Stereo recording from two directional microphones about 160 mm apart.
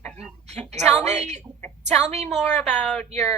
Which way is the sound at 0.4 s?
45° right (ahead or behind).